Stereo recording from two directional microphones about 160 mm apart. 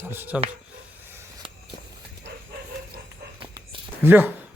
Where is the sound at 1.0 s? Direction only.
15° right (ahead or behind).